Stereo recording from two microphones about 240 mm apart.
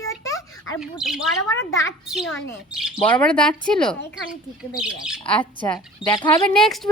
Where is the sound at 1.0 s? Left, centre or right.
Centre.